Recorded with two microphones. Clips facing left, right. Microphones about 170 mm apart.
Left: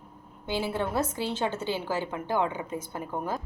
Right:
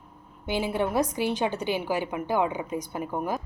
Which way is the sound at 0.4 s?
15° right (ahead or behind).